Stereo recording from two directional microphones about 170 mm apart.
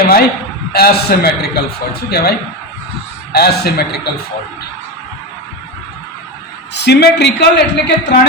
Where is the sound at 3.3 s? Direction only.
70° left (ahead or behind).